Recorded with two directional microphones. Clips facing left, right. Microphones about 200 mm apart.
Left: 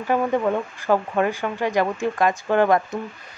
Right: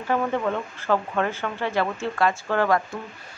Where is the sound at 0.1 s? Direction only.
15° left (ahead or behind).